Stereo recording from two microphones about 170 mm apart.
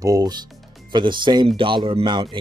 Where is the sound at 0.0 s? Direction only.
20° right (ahead or behind).